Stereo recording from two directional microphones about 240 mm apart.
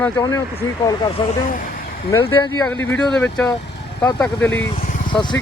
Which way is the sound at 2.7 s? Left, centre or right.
Centre.